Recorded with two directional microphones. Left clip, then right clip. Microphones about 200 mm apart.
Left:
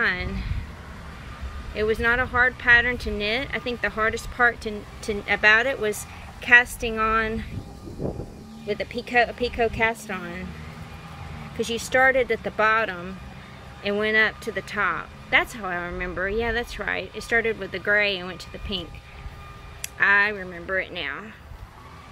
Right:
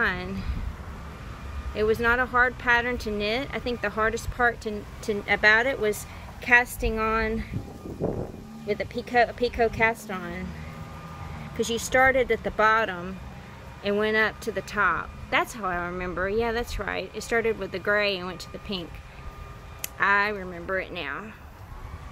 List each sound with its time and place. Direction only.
0.0 s speech: 5° right (ahead or behind)
1.7 s speech: centre (ahead or behind)
9.0 s speech: centre (ahead or behind)
11.5 s speech: centre (ahead or behind)
20.0 s speech: centre (ahead or behind)